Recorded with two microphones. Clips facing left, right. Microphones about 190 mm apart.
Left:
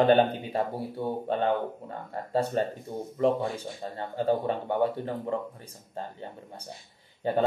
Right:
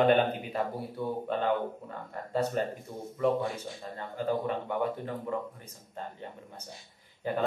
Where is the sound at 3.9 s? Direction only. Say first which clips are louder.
Left 4 dB; 30° left (ahead or behind).